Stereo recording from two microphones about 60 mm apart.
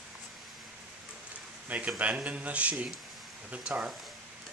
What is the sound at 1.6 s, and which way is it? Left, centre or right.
Speech, right.